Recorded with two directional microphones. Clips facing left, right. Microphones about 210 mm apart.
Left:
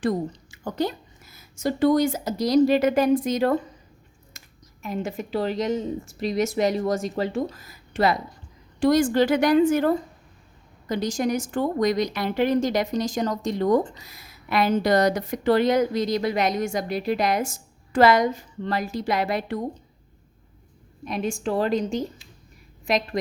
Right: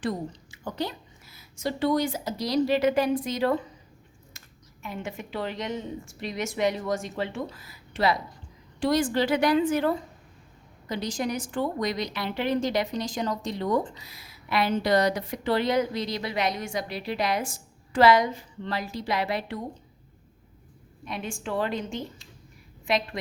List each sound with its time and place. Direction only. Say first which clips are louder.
0.0 s a woman's voice: left 6 dB; 45° left (ahead or behind)
21.0 s speech: left 7 dB; 40° left (ahead or behind)